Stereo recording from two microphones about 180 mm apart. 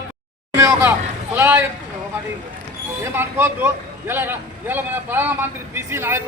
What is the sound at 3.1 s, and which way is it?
A man's voice, 10° right (ahead or behind).